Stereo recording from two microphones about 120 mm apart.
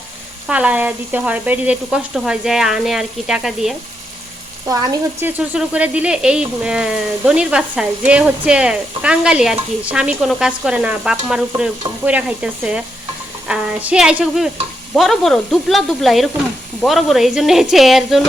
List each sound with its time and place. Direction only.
0.4 s speech: 10° right (ahead or behind)
4.6 s speech: 30° right (ahead or behind)
5.2 s speech: 10° right (ahead or behind)
14.9 s sizzle: centre (ahead or behind)